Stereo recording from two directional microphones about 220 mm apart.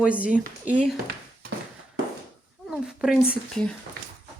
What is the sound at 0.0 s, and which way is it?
Speech, 5° right (ahead or behind).